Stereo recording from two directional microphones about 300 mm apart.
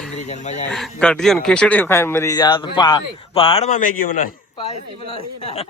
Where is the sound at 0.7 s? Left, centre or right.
Centre.